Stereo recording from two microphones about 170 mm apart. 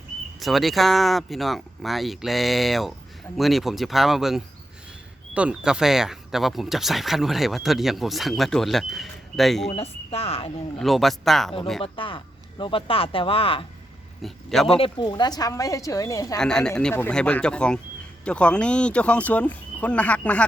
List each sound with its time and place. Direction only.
0.3 s speech: centre (ahead or behind)
9.6 s speech: 35° left (ahead or behind)
10.8 s speech: centre (ahead or behind)
11.8 s speech: 30° left (ahead or behind)
14.2 s a man's voice: centre (ahead or behind)
14.8 s a woman's voice: 25° left (ahead or behind)
16.4 s speech: 5° left (ahead or behind)